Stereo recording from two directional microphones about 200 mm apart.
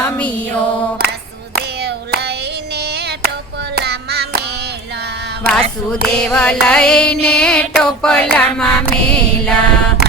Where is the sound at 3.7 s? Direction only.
55° right (ahead or behind).